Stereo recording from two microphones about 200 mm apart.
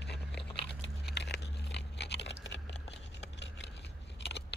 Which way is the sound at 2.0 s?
55° left (ahead or behind).